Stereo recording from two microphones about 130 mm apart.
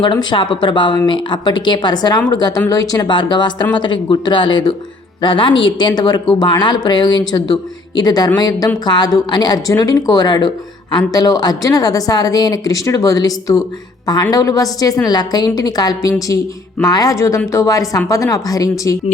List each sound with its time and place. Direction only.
0.0 s a woman's voice: 35° left (ahead or behind)